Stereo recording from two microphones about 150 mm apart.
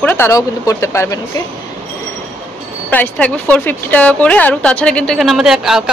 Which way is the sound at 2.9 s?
10° left (ahead or behind).